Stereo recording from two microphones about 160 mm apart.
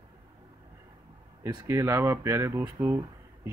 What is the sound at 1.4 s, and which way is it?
Speech, 20° right (ahead or behind).